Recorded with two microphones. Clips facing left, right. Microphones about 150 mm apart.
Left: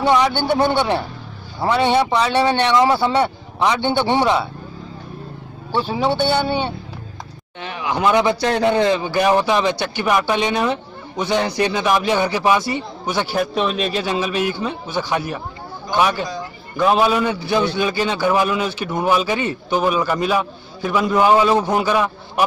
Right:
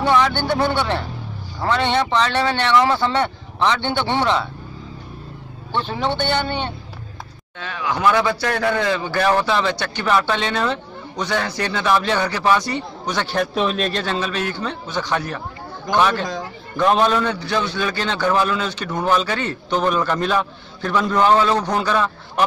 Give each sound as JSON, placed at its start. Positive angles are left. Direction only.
{"t": 0.0, "sound": "speech", "side_deg": 15}
{"t": 5.7, "sound": "speech", "side_deg": 5}